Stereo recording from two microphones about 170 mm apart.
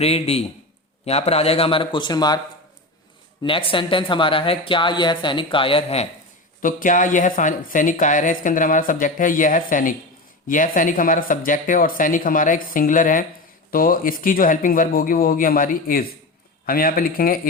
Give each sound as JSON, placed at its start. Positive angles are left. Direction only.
{"t": 0.0, "sound": "speech", "side_deg": 35}
{"t": 3.4, "sound": "speech", "side_deg": 30}
{"t": 6.6, "sound": "speech", "side_deg": 55}